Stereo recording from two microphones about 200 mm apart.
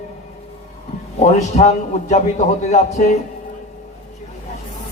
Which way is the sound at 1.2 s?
35° left (ahead or behind).